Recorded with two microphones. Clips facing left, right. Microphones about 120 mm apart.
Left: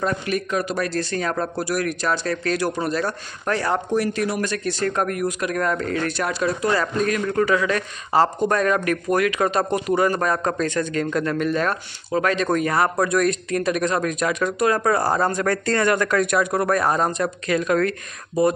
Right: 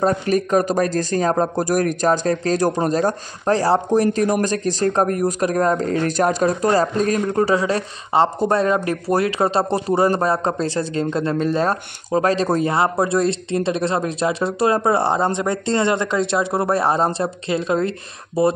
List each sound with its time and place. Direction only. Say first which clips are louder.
0.0 s speech: right 6 dB; 40° right (ahead or behind)